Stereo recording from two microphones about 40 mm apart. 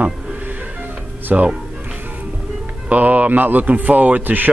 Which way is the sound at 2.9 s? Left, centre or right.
Right.